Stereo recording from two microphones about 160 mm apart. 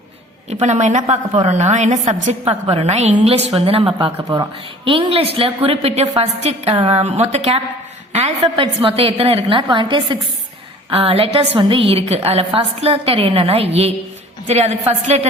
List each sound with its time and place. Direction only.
0.6 s a woman's voice: 45° right (ahead or behind)
2.4 s a woman's voice: 35° right (ahead or behind)